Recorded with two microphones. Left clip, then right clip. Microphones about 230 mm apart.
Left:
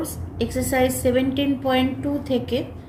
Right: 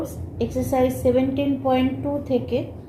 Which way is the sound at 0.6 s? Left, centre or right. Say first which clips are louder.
Even; left.